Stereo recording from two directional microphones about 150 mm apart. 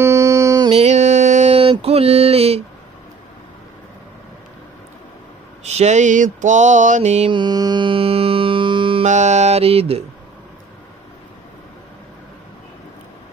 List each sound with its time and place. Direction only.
0.0 s music: 20° right (ahead or behind)
0.7 s mantra: 45° right (ahead or behind)
5.6 s mantra: 45° right (ahead or behind)
7.2 s music: 30° right (ahead or behind)
9.0 s mantra: 50° right (ahead or behind)